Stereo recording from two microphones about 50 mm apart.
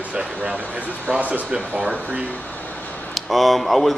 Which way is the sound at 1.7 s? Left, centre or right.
Right.